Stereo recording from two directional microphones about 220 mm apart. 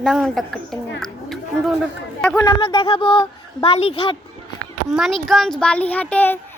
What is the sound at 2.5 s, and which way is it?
A woman's voice, 20° left (ahead or behind).